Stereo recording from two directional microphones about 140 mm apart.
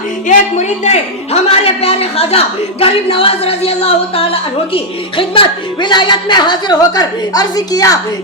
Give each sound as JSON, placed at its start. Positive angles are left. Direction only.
{"t": 0.3, "sound": "a man's voice", "side_deg": 55}